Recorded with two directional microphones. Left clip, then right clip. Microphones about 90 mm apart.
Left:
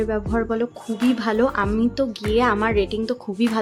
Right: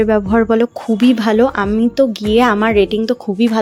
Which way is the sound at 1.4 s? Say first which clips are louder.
Right 6 dB; 75° right (ahead or behind).